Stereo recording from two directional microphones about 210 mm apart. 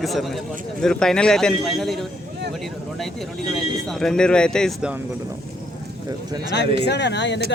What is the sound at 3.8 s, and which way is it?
Speech, centre (ahead or behind).